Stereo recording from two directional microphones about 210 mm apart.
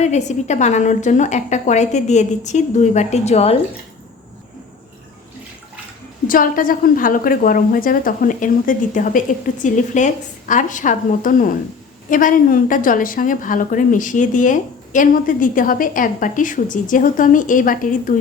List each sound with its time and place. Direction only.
0.0 s a woman's voice: 35° left (ahead or behind)
6.2 s a woman's voice: 40° left (ahead or behind)